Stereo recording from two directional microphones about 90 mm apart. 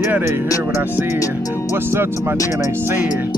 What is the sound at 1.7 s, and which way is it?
Speech, 25° right (ahead or behind).